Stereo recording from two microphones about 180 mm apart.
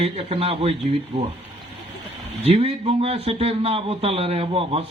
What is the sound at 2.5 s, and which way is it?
A man's voice, 35° right (ahead or behind).